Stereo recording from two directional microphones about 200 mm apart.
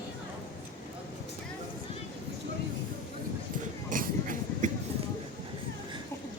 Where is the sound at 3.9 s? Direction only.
40° right (ahead or behind).